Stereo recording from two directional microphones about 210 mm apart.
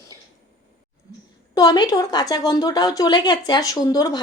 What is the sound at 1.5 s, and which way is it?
A woman's voice, 20° left (ahead or behind).